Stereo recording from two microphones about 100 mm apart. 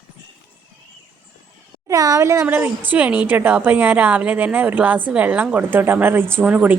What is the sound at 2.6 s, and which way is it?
A woman's voice, 15° right (ahead or behind).